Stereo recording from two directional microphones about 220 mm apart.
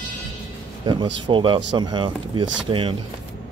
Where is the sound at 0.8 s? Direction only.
20° right (ahead or behind).